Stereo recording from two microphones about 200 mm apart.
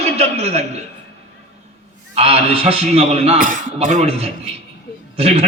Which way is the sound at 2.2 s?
30° right (ahead or behind).